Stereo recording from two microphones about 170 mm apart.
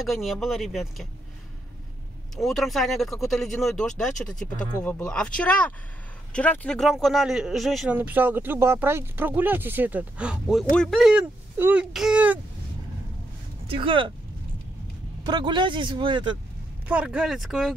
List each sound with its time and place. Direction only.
0.0 s speech: centre (ahead or behind)
2.3 s speech: centre (ahead or behind)
13.7 s speech: 30° right (ahead or behind)
15.2 s speech: 25° right (ahead or behind)
16.8 s speech: 5° right (ahead or behind)